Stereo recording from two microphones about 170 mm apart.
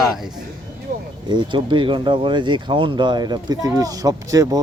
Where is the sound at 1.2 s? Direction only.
25° right (ahead or behind).